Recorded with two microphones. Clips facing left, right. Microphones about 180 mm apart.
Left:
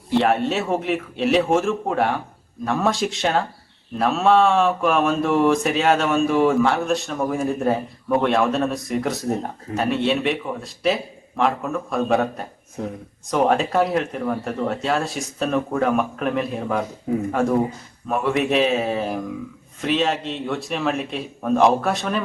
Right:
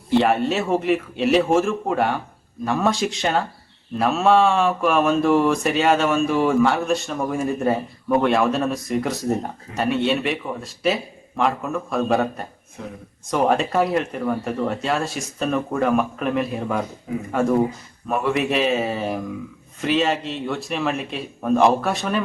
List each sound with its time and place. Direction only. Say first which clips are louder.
0.1 s mantra: right 1 dB; centre (ahead or behind)
12.8 s speech: left 6 dB; 40° left (ahead or behind)
13.3 s mantra: left 1 dB; centre (ahead or behind)
18.1 s mantra: left 1 dB; centre (ahead or behind)